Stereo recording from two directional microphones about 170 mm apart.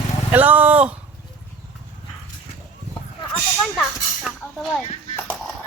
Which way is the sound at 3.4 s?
5° left (ahead or behind).